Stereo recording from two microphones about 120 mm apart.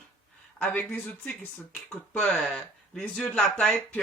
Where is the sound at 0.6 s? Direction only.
15° left (ahead or behind).